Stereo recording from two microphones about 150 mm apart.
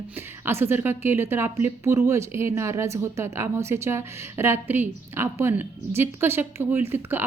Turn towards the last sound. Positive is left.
turn(degrees=-15)  # may be behind; listen again after turning